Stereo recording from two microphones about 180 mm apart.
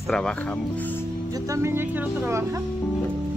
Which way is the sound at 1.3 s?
15° right (ahead or behind).